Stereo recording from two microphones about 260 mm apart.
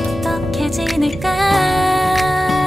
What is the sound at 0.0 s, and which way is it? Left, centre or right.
Music, centre.